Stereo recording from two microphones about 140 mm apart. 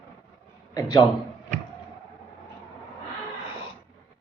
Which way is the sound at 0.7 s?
30° left (ahead or behind).